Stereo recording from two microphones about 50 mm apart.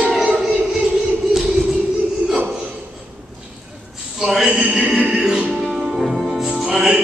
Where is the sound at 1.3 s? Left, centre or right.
Centre.